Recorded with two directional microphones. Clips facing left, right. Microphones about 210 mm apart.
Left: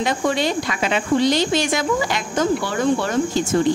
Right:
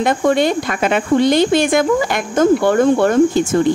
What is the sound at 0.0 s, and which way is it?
Speech, 55° right (ahead or behind).